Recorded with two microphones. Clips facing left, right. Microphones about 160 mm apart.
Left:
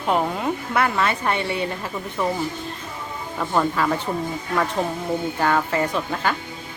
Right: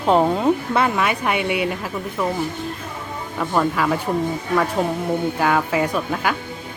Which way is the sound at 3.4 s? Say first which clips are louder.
Right 1 dB; centre (ahead or behind).